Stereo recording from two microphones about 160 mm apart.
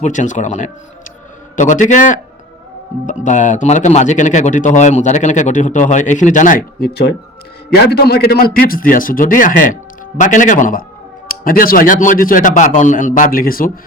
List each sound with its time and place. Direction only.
0.0 s a man's voice: 50° left (ahead or behind)
3.2 s a man's voice: 50° left (ahead or behind)
6.7 s a man's voice: 90° left; by 13.7 s 65° left (ahead or behind)